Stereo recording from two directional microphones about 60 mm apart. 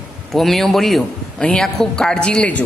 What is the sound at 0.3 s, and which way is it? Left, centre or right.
A woman's voice, centre.